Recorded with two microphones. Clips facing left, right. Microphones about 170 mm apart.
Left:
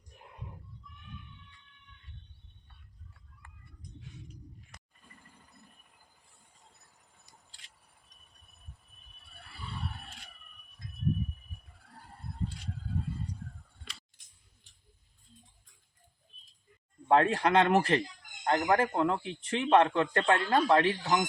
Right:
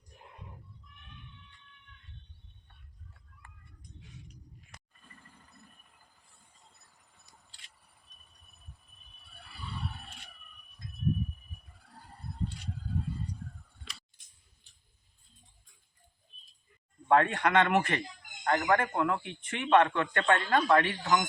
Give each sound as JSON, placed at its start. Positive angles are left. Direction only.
{"t": 4.9, "sound": "vehicle", "side_deg": 15}
{"t": 9.3, "sound": "roar", "side_deg": 0}
{"t": 11.9, "sound": "a sound", "side_deg": 0}
{"t": 17.1, "sound": "speech", "side_deg": 30}